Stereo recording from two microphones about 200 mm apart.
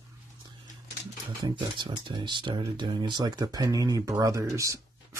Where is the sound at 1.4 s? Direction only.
25° right (ahead or behind).